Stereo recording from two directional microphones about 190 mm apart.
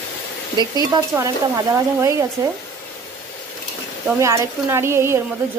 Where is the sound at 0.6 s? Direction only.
20° right (ahead or behind).